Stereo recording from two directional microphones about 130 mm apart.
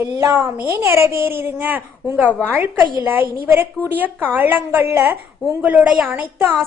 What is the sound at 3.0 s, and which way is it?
A woman's voice, 15° right (ahead or behind).